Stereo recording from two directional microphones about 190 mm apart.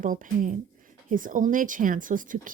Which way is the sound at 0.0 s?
45° right (ahead or behind).